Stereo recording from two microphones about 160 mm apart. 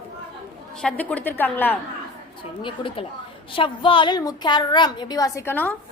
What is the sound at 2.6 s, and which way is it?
A woman's voice, 35° left (ahead or behind).